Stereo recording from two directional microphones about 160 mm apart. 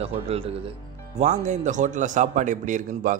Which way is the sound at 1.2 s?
45° right (ahead or behind).